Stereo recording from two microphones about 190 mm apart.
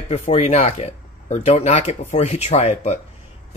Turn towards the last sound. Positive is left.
turn(degrees=35)  # may be behind; listen again after turning